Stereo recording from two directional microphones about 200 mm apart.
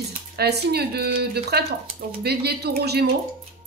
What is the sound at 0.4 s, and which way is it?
Speech, 55° right (ahead or behind).